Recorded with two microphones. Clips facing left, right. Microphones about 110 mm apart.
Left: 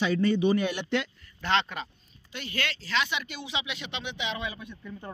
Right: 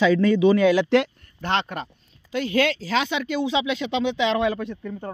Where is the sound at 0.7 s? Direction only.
90° right.